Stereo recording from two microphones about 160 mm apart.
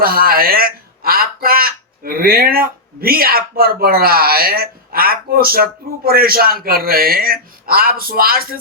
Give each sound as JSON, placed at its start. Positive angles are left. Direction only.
{"t": 0.0, "sound": "speech", "side_deg": -70}